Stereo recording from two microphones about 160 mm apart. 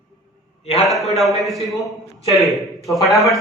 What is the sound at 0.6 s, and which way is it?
Speech, 40° left (ahead or behind).